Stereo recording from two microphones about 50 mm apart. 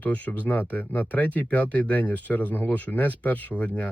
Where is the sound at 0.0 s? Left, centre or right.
Left.